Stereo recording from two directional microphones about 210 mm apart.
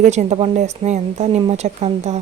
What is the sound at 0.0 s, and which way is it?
A woman's voice, 35° right (ahead or behind).